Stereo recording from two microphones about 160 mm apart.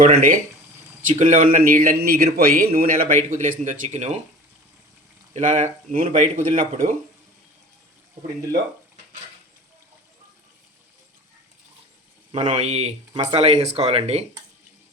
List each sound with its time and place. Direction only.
0.1 s a man's voice: 55° right (ahead or behind)
3.2 s speech: 50° right (ahead or behind)
5.3 s a man's voice: 50° right (ahead or behind)
12.3 s speech: 45° right (ahead or behind)